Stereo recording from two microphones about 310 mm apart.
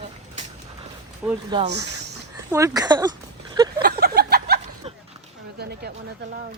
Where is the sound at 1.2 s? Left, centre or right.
Centre.